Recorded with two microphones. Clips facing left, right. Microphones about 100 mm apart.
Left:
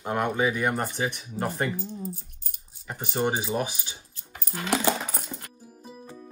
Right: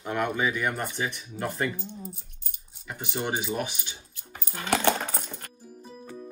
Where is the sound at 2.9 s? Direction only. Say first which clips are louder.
Left 4 dB; 40° left (ahead or behind).